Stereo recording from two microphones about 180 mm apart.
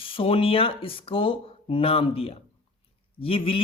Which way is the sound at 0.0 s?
30° left (ahead or behind).